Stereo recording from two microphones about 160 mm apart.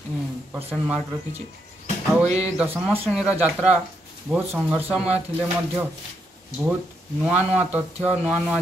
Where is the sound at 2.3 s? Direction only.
5° right (ahead or behind).